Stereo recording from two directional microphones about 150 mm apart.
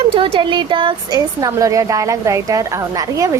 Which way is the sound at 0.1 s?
35° right (ahead or behind).